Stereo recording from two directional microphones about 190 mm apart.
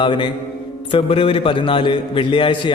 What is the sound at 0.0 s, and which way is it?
A man's voice, 25° left (ahead or behind).